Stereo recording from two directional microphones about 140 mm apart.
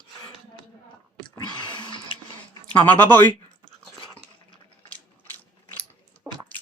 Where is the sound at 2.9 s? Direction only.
15° left (ahead or behind).